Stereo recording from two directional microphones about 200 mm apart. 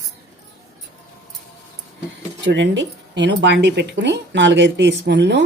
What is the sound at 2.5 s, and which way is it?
Speech, 65° right (ahead or behind).